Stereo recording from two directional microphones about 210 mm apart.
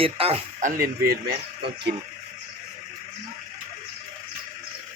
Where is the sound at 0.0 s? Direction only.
30° right (ahead or behind).